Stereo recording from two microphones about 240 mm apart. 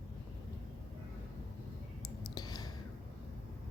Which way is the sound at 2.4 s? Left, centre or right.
Centre.